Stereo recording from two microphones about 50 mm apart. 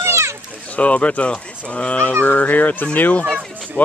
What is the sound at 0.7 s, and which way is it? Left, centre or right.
Speech, left.